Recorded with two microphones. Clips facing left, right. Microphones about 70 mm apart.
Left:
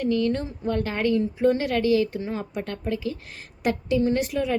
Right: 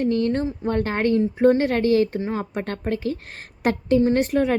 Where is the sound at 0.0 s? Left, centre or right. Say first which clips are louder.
Right 3 dB; right.